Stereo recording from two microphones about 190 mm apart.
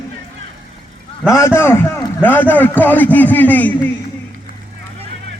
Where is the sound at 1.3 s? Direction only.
15° left (ahead or behind).